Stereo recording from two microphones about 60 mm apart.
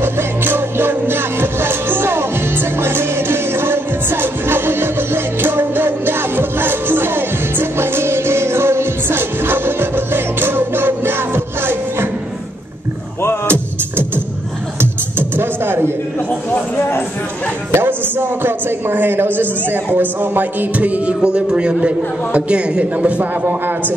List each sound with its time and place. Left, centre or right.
0.0 s music: right
13.5 s music: right
16.7 s clip-clop: left
17.6 s a sound: right
19.6 s speech: right